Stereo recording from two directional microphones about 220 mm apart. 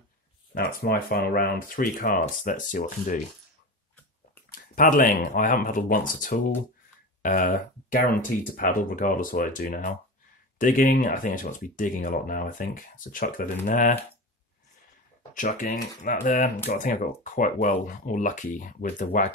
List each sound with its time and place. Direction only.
0.6 s speech: 40° left (ahead or behind)
4.5 s speech: 40° left (ahead or behind)
15.3 s speech: 35° left (ahead or behind)